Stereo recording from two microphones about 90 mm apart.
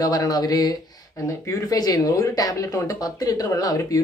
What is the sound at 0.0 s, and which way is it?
Speech, 45° left (ahead or behind).